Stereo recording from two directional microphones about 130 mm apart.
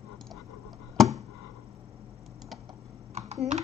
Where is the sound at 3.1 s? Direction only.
55° right (ahead or behind).